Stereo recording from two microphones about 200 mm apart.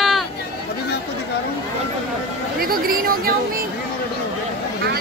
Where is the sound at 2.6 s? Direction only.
45° right (ahead or behind).